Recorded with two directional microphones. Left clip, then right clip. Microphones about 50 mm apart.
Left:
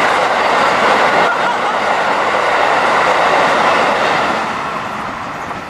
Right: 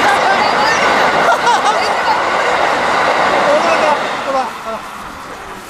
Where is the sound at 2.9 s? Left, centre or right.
Centre.